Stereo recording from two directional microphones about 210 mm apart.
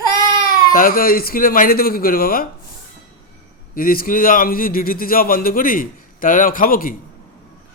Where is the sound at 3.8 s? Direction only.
45° left (ahead or behind).